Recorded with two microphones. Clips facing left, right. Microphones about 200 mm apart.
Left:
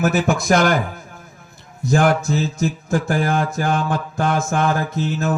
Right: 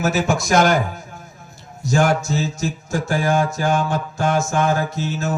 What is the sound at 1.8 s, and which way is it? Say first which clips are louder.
Mantra: left 1 dB; 55° left (ahead or behind).